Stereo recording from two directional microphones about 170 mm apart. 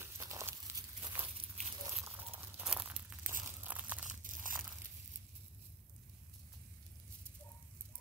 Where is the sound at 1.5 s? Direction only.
40° right (ahead or behind).